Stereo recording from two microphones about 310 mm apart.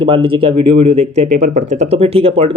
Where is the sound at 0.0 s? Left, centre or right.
Centre.